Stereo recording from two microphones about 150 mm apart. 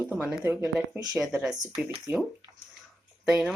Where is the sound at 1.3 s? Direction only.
Centre (ahead or behind).